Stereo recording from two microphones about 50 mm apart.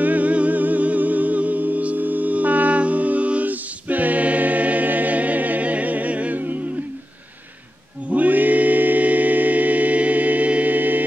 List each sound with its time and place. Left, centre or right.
0.0 s music: right
8.1 s music: right